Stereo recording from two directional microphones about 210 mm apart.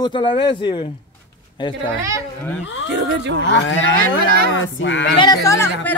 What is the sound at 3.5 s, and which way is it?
Cattle, 60° left (ahead or behind).